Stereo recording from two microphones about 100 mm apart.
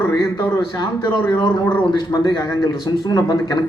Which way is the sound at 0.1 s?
40° left (ahead or behind).